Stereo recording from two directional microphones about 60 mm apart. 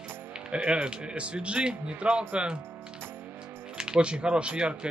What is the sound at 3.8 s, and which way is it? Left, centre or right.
Speech, centre.